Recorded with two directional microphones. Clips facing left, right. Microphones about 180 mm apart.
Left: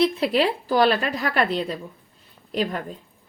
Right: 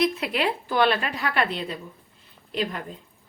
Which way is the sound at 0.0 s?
35° left (ahead or behind).